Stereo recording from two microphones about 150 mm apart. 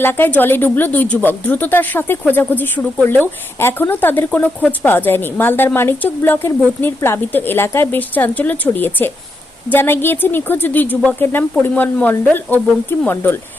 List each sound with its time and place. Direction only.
0.0 s speech: 15° left (ahead or behind)